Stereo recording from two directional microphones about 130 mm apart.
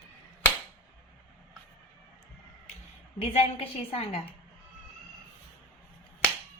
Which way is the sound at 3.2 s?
45° left (ahead or behind).